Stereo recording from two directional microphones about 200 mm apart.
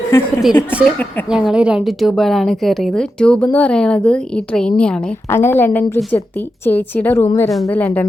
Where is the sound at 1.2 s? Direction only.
5° right (ahead or behind).